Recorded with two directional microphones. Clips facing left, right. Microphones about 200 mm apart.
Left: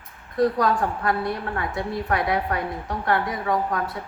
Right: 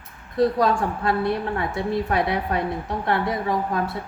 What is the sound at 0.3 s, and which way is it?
A woman's voice, 25° right (ahead or behind).